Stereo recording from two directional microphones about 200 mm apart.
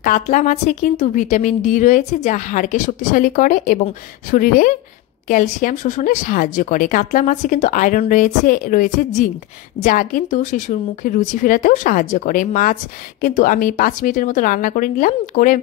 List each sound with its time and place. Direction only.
0.0 s a woman's voice: 40° left (ahead or behind)